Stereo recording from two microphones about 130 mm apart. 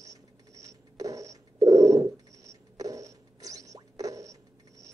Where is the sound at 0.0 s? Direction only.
25° right (ahead or behind).